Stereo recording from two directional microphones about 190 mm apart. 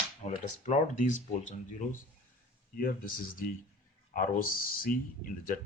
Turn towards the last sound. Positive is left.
turn(degrees=45)  # may be behind; listen again after turning